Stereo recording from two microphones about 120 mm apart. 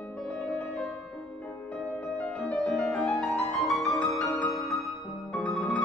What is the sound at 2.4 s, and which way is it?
Music, centre (ahead or behind).